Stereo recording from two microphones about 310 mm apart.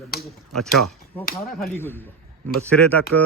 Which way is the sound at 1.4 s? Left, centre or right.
Centre.